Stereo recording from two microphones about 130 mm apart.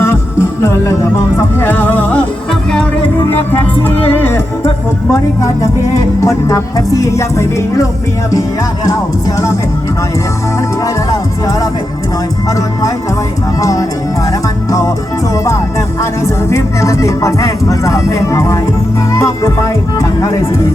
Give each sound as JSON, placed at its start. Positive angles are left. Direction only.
{"t": 0.0, "sound": "music", "side_deg": 20}
{"t": 3.2, "sound": "music", "side_deg": 15}
{"t": 5.1, "sound": "speech", "side_deg": 25}
{"t": 13.6, "sound": "speech", "side_deg": 25}
{"t": 14.7, "sound": "music", "side_deg": 25}
{"t": 16.5, "sound": "speech", "side_deg": 25}